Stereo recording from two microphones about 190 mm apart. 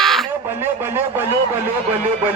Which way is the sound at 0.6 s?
10° right (ahead or behind).